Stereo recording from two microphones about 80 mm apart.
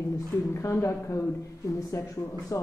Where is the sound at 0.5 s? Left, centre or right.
Left.